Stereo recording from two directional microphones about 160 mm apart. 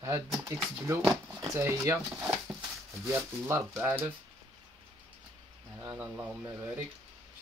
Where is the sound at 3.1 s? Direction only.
15° right (ahead or behind).